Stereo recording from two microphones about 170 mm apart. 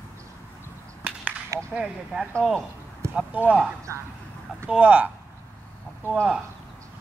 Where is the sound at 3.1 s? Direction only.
5° right (ahead or behind).